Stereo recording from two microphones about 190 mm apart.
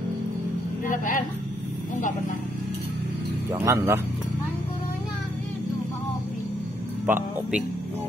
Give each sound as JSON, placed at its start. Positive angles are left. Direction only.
{"t": 0.8, "sound": "a sound", "side_deg": 45}
{"t": 3.5, "sound": "speech", "side_deg": -15}
{"t": 7.1, "sound": "speech", "side_deg": -10}